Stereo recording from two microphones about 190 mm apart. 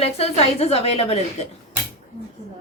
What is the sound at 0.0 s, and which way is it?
A woman's voice, 35° left (ahead or behind).